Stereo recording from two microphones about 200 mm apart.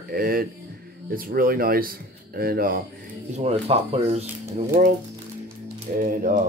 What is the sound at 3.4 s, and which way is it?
Speech, 30° right (ahead or behind).